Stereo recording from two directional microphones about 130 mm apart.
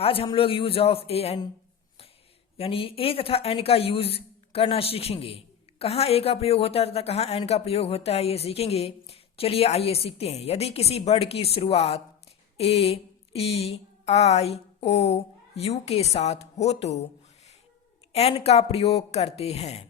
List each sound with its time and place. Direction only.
0.0 s a woman's voice: 45° left (ahead or behind)
2.6 s a woman's voice: 45° left (ahead or behind)
18.1 s a woman's voice: 55° left (ahead or behind)